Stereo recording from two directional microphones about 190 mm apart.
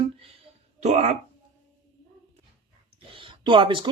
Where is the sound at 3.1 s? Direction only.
25° right (ahead or behind).